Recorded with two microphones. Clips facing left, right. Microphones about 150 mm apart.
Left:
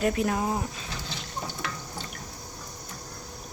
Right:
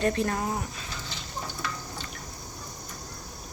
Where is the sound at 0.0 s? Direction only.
5° left (ahead or behind).